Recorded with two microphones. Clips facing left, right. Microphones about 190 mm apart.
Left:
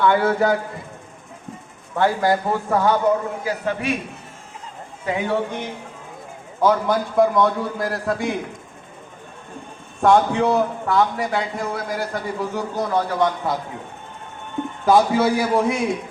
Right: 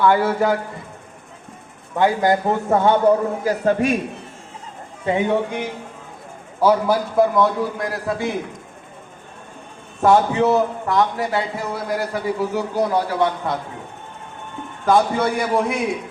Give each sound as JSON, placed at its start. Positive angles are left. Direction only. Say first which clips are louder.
{"t": 0.0, "sound": "a man's voice", "louder": "right 1 dB", "side_deg": -5}
{"t": 2.0, "sound": "a man's voice", "louder": "right 2 dB", "side_deg": -15}
{"t": 3.4, "sound": "a man's voice", "louder": "right 5 dB", "side_deg": -40}
{"t": 5.0, "sound": "a man's voice", "louder": "right 3 dB", "side_deg": -20}
{"t": 10.0, "sound": "a man's voice", "louder": "right 1 dB", "side_deg": -5}
{"t": 14.8, "sound": "a man's voice", "louder": "left 1 dB", "side_deg": 5}